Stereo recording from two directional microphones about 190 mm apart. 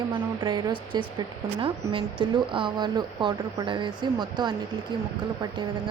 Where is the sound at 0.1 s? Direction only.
25° right (ahead or behind).